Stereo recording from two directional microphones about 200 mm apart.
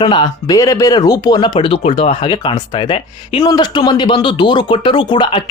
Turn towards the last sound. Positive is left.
turn(degrees=25)  # may be behind; listen again after turning